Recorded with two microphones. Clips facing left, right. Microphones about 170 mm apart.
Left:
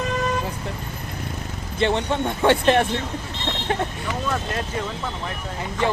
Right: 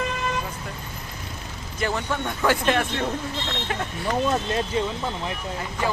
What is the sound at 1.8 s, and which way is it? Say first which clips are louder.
Speech: left 5 dB; 25° left (ahead or behind).